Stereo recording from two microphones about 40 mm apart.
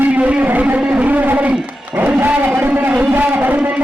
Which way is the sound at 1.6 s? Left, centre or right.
Right.